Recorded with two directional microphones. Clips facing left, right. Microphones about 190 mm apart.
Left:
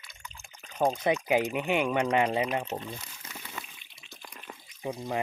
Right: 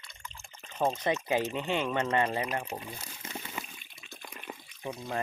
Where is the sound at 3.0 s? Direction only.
30° right (ahead or behind).